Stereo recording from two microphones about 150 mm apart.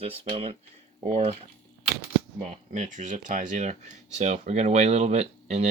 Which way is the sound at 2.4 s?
50° right (ahead or behind).